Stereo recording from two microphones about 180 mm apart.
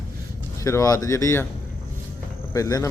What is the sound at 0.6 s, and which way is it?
Speech, 20° left (ahead or behind).